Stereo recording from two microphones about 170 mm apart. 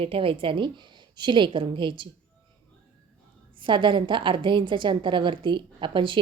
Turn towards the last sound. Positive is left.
turn(degrees=-30)  # may be behind; listen again after turning